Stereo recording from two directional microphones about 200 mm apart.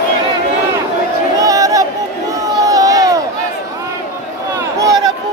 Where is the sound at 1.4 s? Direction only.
15° right (ahead or behind).